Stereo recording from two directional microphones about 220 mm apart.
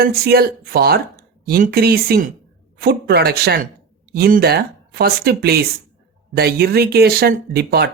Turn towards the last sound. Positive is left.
turn(degrees=-45)  # may be behind; listen again after turning